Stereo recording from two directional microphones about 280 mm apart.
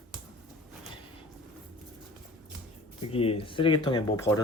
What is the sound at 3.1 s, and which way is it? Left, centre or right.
Speech, centre.